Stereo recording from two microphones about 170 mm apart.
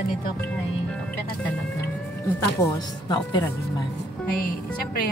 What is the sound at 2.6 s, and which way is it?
Speech, 20° left (ahead or behind).